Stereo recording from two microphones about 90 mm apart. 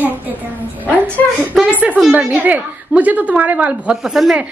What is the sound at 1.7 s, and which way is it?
A woman's voice, 15° right (ahead or behind).